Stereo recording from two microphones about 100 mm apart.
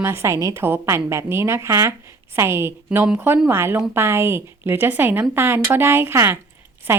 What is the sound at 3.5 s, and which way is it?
Speech, 25° right (ahead or behind).